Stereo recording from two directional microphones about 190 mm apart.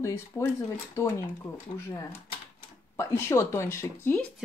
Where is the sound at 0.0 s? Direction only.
15° left (ahead or behind).